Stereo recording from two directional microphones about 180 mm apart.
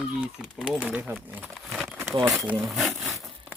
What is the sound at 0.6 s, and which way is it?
Speech, 5° right (ahead or behind).